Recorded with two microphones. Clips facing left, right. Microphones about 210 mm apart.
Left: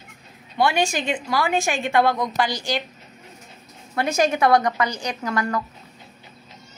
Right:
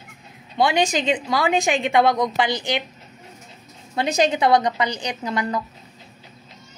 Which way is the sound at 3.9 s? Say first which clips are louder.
Right 1 dB; 15° right (ahead or behind).